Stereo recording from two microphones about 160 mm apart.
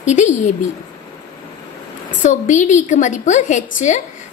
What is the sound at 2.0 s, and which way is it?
A woman's voice, 50° left (ahead or behind).